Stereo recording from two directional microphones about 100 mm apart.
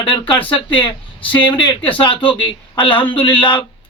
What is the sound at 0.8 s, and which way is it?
Speech, 55° left (ahead or behind).